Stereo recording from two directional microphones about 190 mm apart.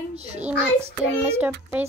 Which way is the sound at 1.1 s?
10° right (ahead or behind).